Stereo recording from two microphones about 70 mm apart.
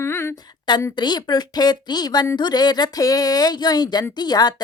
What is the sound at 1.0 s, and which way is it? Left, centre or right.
Speech, left.